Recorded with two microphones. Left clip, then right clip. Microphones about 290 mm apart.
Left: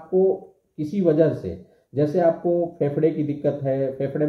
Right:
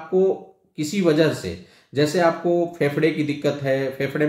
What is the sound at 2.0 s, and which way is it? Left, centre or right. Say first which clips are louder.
Speech: right 1 dB; right.